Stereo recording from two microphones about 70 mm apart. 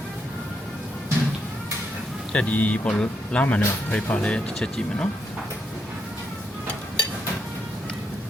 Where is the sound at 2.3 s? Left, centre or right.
Centre.